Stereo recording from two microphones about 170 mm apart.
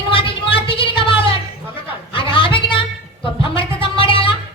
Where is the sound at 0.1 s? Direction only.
30° left (ahead or behind).